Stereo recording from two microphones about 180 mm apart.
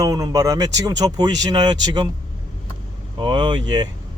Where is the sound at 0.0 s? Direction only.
20° right (ahead or behind).